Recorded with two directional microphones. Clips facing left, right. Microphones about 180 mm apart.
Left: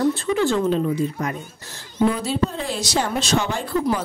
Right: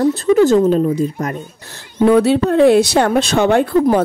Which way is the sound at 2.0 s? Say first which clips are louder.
Right 9 dB; 65° right (ahead or behind).